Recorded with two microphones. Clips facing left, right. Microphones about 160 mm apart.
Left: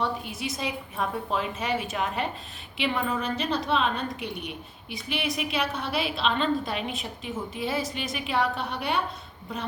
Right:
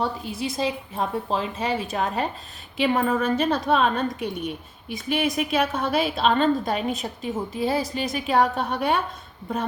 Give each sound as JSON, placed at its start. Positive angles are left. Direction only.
{"t": 0.0, "sound": "a woman's voice", "side_deg": -35}